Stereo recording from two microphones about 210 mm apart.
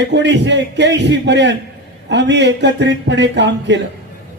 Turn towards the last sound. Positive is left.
turn(degrees=-55)  # may be behind; listen again after turning